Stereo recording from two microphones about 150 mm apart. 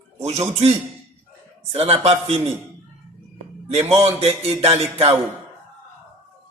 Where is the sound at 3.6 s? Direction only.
45° right (ahead or behind).